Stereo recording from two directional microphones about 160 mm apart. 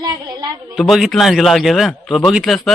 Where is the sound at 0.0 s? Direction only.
25° right (ahead or behind).